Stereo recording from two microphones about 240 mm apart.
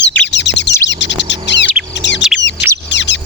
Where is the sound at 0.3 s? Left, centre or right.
Left.